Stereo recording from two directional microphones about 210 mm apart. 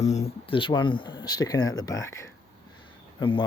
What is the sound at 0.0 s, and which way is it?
Speech, 30° left (ahead or behind).